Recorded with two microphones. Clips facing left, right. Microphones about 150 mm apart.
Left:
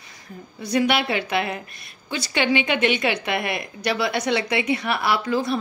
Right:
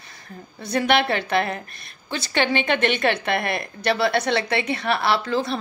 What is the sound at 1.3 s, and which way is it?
A woman's voice, 15° left (ahead or behind).